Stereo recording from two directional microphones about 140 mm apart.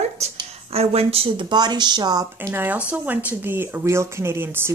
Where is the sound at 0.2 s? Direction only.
45° right (ahead or behind); by 2.5 s 30° right (ahead or behind).